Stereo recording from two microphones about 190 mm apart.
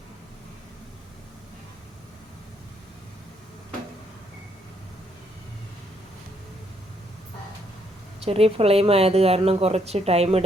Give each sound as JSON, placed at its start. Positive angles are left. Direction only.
{"t": 8.2, "sound": "a woman's voice", "side_deg": -30}